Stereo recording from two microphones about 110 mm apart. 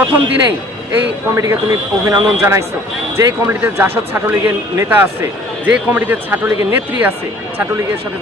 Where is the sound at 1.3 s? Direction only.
30° right (ahead or behind).